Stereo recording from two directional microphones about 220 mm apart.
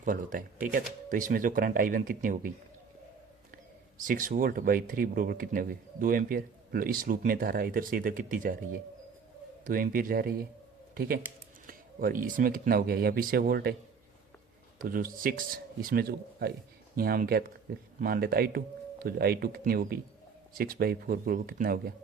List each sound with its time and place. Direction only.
0.0 s speech: 40° right (ahead or behind)
3.9 s speech: 40° right (ahead or behind)
9.6 s speech: 40° right (ahead or behind)
11.6 s speech: 40° right (ahead or behind)
14.8 s speech: 40° right (ahead or behind)